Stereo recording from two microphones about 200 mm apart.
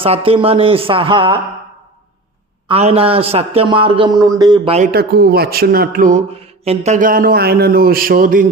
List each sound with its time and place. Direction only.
0.0 s a man's voice: 30° right (ahead or behind)
2.6 s a man's voice: 30° right (ahead or behind)
4.9 s speech: 50° right (ahead or behind)